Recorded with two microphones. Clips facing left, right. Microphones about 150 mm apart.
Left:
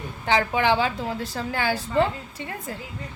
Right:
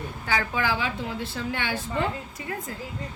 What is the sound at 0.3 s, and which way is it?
Speech, 25° left (ahead or behind).